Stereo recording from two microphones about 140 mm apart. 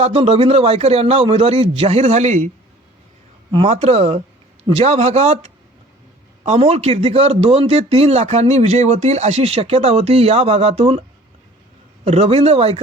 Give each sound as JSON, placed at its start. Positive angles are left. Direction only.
{"t": 0.0, "sound": "a man's voice", "side_deg": -45}
{"t": 3.7, "sound": "a man's voice", "side_deg": -50}
{"t": 12.0, "sound": "a man's voice", "side_deg": -50}